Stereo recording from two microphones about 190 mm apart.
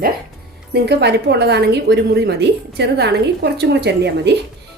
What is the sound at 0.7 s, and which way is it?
A woman's voice, 60° right (ahead or behind).